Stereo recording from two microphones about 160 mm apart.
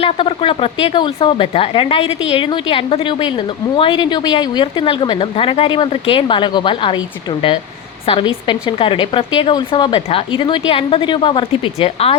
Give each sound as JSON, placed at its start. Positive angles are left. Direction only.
{"t": 0.0, "sound": "speech", "side_deg": 35}